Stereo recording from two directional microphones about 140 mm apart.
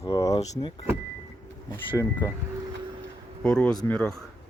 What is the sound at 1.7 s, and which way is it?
Speech, 15° left (ahead or behind).